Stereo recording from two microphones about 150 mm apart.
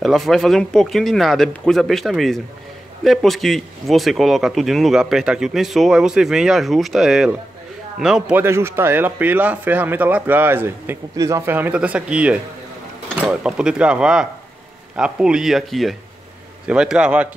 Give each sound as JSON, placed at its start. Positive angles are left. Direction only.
{"t": 0.0, "sound": "speech", "side_deg": 0}